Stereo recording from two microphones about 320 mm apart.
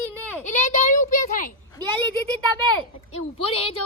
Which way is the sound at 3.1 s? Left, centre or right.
Centre.